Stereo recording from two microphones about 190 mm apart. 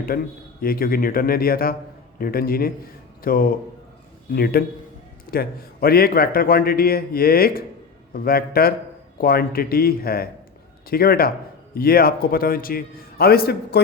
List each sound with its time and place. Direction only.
0.1 s a man's voice: 50° left (ahead or behind)